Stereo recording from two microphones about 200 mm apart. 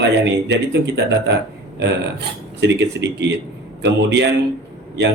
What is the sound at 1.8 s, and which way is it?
Speech, 60° right (ahead or behind).